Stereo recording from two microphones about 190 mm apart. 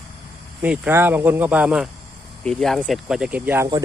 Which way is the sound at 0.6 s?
10° right (ahead or behind).